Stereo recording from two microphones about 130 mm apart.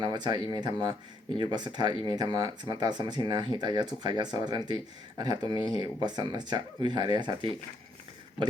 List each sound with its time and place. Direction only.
0.0 s speech: 35° right (ahead or behind)